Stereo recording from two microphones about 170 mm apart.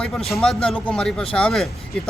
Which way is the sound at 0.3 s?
Centre (ahead or behind).